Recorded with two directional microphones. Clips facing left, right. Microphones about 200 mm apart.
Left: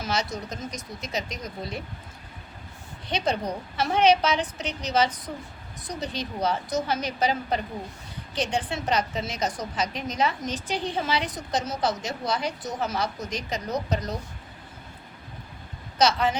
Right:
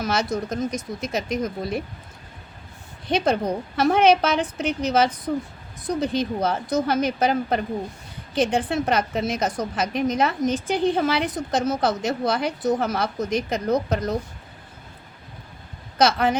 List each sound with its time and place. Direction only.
0.0 s a woman's voice: 55° right (ahead or behind)
3.1 s a woman's voice: 55° right (ahead or behind)
16.0 s a woman's voice: 55° right (ahead or behind)